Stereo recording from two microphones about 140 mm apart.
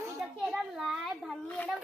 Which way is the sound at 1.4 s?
10° left (ahead or behind).